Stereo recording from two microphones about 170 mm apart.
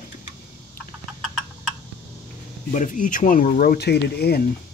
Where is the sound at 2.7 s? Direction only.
50° left (ahead or behind).